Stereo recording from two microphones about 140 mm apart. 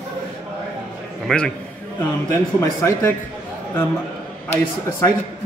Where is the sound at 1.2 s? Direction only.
5° left (ahead or behind).